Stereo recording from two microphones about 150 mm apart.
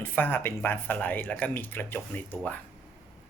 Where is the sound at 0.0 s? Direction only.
15° left (ahead or behind).